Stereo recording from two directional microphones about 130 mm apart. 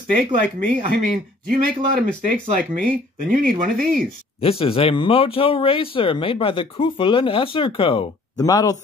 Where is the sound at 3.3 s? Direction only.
90° right.